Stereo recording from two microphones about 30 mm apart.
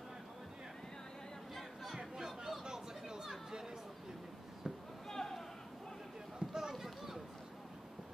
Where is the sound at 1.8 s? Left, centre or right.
Centre.